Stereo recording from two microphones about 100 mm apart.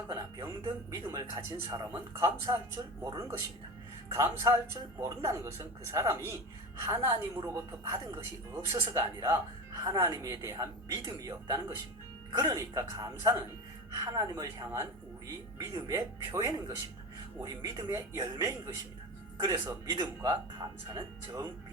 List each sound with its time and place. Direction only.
0.1 s a man's voice: 35° right (ahead or behind)
15.9 s a man's voice: 30° right (ahead or behind)